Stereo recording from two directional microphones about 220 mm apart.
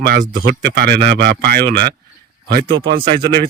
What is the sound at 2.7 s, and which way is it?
Speech, 20° right (ahead or behind).